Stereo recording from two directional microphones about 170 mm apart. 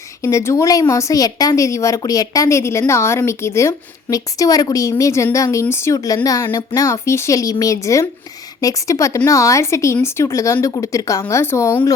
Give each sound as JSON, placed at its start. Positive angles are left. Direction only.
{"t": 0.2, "sound": "a woman's voice", "side_deg": 15}